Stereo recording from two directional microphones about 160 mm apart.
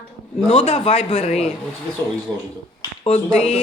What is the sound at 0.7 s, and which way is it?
Speech, 45° left (ahead or behind).